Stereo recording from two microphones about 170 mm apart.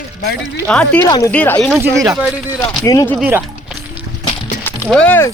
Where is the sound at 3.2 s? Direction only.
15° right (ahead or behind).